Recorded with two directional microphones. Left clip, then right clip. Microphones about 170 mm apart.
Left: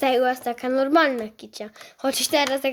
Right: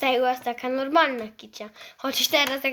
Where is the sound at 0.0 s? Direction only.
45° left (ahead or behind).